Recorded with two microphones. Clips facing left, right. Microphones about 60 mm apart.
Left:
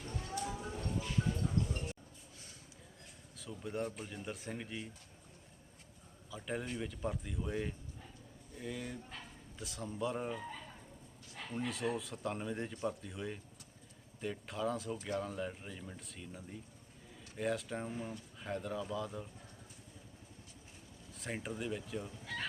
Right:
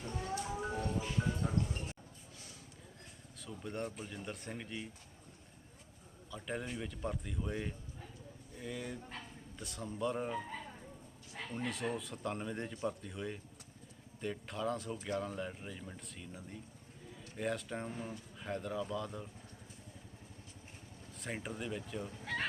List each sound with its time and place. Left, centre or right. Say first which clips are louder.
0.1 s music: right 1 dB; right
1.2 s music: left 1 dB; right
3.3 s speech: left 2 dB; centre
6.3 s speech: left 1 dB; centre
11.5 s speech: left 1 dB; centre
21.2 s speech: left 1 dB; centre
22.2 s fowl: right 4 dB; right